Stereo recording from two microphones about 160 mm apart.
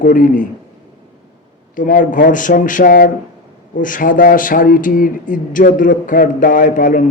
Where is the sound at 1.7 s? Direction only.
55° left (ahead or behind).